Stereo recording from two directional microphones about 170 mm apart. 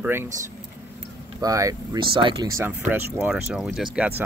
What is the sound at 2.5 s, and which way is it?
Speech, 15° right (ahead or behind).